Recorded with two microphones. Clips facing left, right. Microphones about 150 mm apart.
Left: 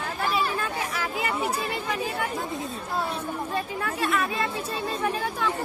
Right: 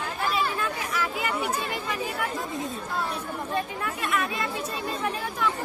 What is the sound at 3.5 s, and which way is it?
Speech, 35° left (ahead or behind).